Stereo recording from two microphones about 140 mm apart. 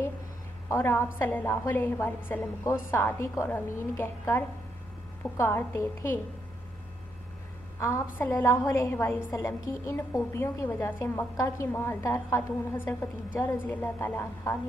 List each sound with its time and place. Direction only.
0.7 s a woman's voice: 15° left (ahead or behind)
7.8 s a woman's voice: 20° left (ahead or behind)